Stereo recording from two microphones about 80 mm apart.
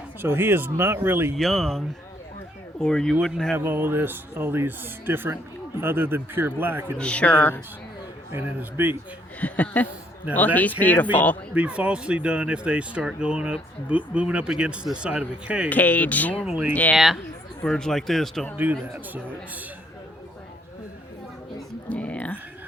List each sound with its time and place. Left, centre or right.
0.2 s speech: right
1.4 s speech: centre
2.8 s speech: centre
3.6 s speech: right
6.9 s a man's voice: centre
8.3 s speech: right
9.4 s speech: centre
11.5 s speech: centre
15.7 s speech: left
16.5 s speech: centre
16.9 s speech: centre
17.7 s speech: centre
18.5 s speech: right
21.8 s a sound: centre